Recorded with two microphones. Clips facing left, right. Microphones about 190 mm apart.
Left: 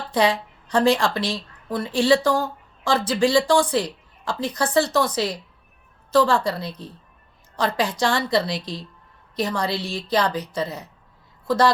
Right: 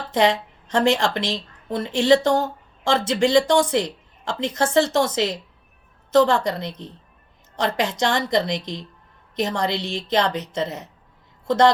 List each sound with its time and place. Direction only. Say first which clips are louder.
0.1 s a woman's voice: right 1 dB; 25° right (ahead or behind)